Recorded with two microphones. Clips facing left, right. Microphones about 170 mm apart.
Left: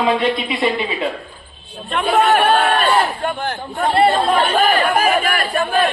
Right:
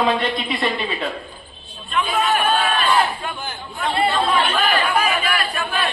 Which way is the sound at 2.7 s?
55° left (ahead or behind).